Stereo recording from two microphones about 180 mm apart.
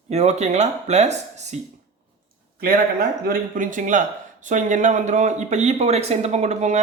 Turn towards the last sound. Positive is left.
turn(degrees=-40)  # may be behind; listen again after turning